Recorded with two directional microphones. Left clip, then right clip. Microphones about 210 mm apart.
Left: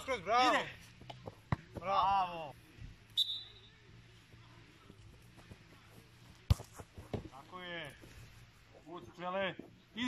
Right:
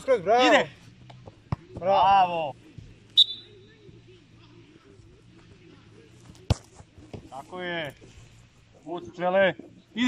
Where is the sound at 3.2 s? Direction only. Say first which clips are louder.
Right 15 dB; 45° right (ahead or behind).